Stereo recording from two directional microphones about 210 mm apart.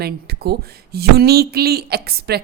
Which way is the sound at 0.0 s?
50° right (ahead or behind).